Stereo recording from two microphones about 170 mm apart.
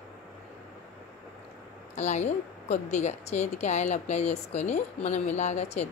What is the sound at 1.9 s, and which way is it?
A woman's voice, 45° left (ahead or behind).